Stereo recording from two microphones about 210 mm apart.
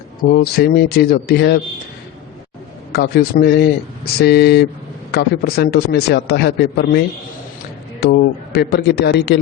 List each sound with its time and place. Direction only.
0.2 s a man's voice: 50° left (ahead or behind)
2.9 s a man's voice: 50° left (ahead or behind)
8.0 s a man's voice: 50° left (ahead or behind)